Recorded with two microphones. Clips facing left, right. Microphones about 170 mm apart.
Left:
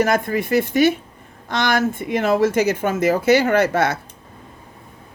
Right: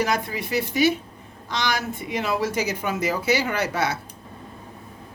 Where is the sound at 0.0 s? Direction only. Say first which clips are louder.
Left 6 dB; 50° left (ahead or behind).